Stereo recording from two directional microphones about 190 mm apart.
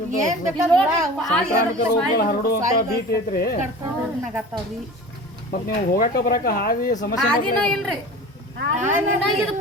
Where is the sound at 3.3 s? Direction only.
55° left (ahead or behind).